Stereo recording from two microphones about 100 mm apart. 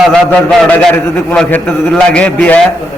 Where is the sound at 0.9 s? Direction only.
5° left (ahead or behind).